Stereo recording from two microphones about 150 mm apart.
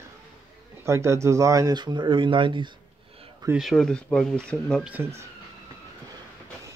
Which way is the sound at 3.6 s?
Centre (ahead or behind).